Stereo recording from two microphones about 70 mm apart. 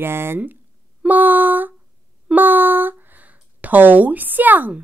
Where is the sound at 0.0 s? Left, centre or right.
Right.